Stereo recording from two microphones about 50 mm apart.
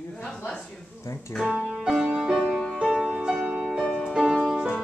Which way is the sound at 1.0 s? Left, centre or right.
Left.